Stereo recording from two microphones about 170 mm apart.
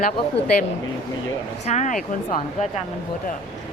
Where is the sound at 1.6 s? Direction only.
40° left (ahead or behind).